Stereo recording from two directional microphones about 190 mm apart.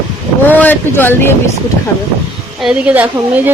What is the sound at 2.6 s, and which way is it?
Speech, 5° right (ahead or behind).